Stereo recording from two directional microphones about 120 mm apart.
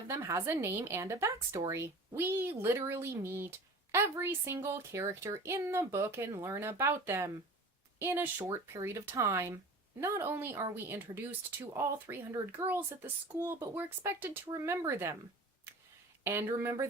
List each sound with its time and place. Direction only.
0.1 s a woman's voice: 25° right (ahead or behind)
16.2 s a woman's voice: 20° right (ahead or behind)